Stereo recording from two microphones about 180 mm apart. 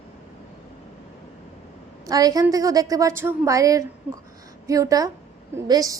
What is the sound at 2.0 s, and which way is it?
A woman's voice, 20° right (ahead or behind).